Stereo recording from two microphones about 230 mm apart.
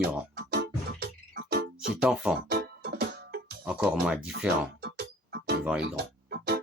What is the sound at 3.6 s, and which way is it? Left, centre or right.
Speech, centre.